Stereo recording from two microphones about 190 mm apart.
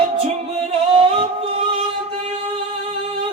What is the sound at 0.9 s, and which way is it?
A capella, 30° right (ahead or behind).